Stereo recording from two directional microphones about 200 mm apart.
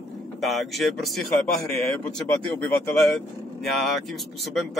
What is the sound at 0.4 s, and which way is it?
Speech, centre (ahead or behind).